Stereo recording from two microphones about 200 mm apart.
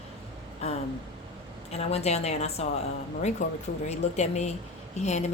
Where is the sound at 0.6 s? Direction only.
30° left (ahead or behind).